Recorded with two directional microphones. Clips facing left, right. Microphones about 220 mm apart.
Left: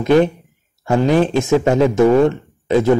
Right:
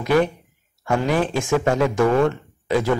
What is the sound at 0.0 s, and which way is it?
A man's voice, 25° left (ahead or behind).